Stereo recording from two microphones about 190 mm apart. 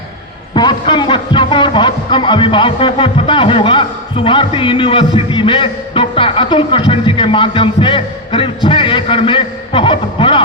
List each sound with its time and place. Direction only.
0.5 s a man's voice: 25° left (ahead or behind)